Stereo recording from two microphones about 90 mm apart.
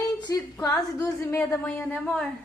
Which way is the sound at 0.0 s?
40° left (ahead or behind).